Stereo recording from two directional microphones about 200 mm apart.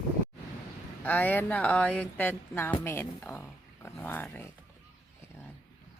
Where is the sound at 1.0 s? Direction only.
10° left (ahead or behind).